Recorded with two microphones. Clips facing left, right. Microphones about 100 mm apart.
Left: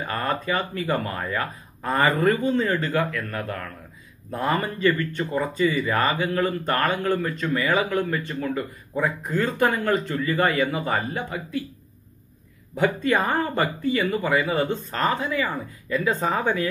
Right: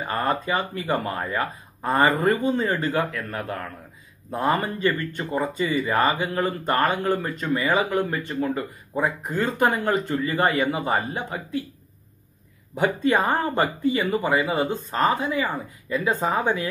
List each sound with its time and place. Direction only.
0.2 s speech: 20° right (ahead or behind)
12.8 s speech: 25° right (ahead or behind)